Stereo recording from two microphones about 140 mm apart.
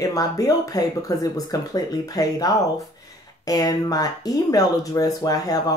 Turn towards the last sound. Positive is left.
turn(degrees=25)  # may be behind; listen again after turning